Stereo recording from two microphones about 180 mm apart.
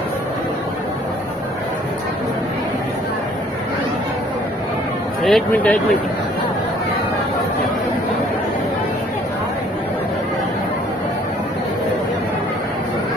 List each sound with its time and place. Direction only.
5.2 s speech: 5° left (ahead or behind)